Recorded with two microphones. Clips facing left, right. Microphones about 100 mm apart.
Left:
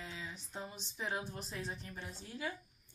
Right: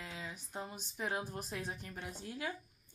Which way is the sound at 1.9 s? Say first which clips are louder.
Right 3 dB; 55° right (ahead or behind).